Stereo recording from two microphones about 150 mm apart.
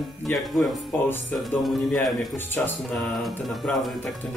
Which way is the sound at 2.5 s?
15° left (ahead or behind).